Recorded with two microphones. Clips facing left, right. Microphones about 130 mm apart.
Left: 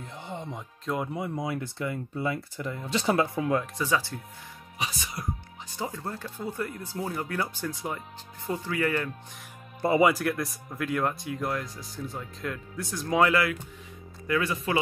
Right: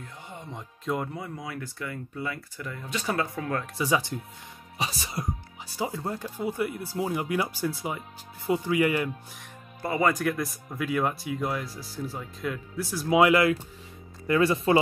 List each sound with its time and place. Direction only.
0.0 s music: 25° left (ahead or behind)
0.6 s speech: centre (ahead or behind)
1.1 s speech: 25° left (ahead or behind)
3.7 s speech: 15° right (ahead or behind)
4.7 s speech: 30° right (ahead or behind)
5.8 s speech: 5° right (ahead or behind)
9.8 s speech: 25° left (ahead or behind)
10.0 s speech: centre (ahead or behind); by 13.6 s 20° right (ahead or behind)
14.2 s speech: 30° right (ahead or behind)